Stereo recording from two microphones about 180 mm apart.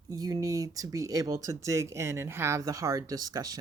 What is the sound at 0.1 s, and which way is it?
Speech, 20° right (ahead or behind).